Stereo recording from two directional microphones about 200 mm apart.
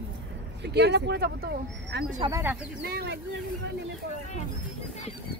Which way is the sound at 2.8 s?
55° right (ahead or behind).